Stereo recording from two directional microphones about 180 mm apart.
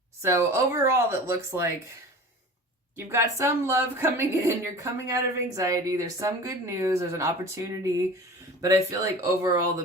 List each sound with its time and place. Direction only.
0.2 s a woman's voice: 15° right (ahead or behind)
2.9 s a woman's voice: 15° right (ahead or behind)